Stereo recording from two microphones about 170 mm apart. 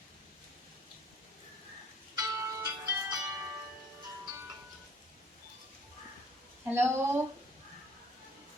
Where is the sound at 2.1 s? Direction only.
25° right (ahead or behind).